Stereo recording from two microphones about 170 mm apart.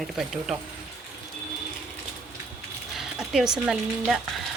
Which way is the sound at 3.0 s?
Centre (ahead or behind).